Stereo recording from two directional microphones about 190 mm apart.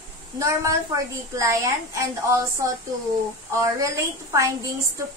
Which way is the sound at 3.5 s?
15° right (ahead or behind).